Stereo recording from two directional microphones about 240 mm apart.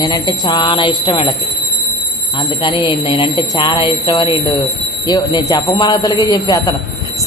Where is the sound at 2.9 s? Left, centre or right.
Centre.